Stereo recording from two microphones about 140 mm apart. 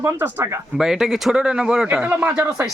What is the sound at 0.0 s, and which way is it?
Speech, 15° right (ahead or behind).